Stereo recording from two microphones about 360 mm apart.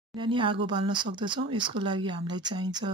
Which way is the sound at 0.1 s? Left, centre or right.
Centre.